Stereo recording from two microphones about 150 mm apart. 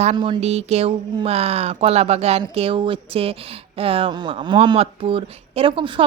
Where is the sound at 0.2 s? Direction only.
40° right (ahead or behind).